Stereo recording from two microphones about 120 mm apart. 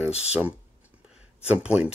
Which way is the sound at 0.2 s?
10° right (ahead or behind).